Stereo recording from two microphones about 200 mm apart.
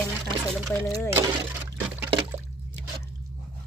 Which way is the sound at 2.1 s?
25° right (ahead or behind).